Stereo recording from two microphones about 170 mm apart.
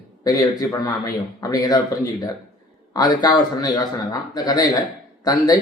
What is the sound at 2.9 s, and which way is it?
A man's voice, 20° left (ahead or behind).